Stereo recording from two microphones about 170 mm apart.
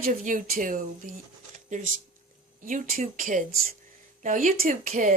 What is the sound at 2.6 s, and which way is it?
Speech, 55° right (ahead or behind).